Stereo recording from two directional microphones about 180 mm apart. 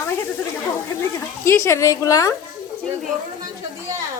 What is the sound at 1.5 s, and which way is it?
Speech, 15° left (ahead or behind).